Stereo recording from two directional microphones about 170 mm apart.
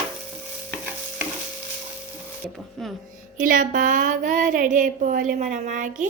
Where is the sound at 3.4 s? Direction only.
50° right (ahead or behind).